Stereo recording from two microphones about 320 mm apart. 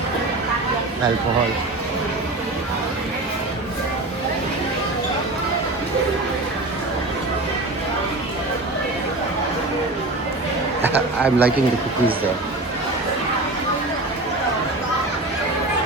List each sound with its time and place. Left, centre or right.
10.8 s a man's voice: centre